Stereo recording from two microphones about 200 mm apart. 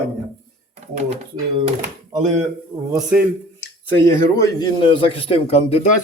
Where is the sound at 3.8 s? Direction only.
10° left (ahead or behind); by 5.9 s 30° left (ahead or behind).